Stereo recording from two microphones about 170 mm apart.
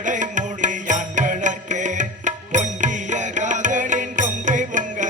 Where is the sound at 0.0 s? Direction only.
50° right (ahead or behind).